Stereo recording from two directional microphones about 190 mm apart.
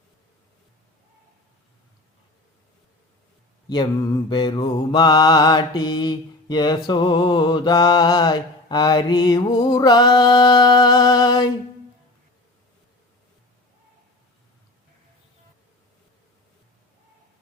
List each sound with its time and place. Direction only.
4.3 s mantra: 25° left (ahead or behind)